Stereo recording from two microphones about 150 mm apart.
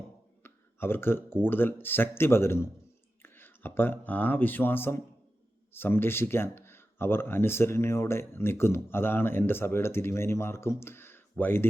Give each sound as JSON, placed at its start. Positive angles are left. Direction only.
{"t": 0.4, "sound": "speech", "side_deg": 15}